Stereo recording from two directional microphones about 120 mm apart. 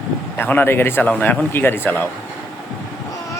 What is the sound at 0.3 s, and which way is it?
A man's voice, 15° left (ahead or behind).